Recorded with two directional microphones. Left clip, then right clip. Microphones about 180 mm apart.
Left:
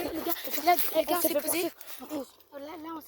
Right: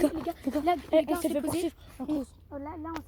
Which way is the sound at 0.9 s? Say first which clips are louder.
Right 1 dB; 25° right (ahead or behind).